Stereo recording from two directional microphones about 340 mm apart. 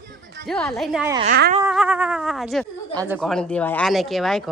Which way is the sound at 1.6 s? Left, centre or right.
Centre.